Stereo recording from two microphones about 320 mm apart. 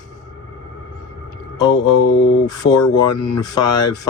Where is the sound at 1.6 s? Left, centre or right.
Left.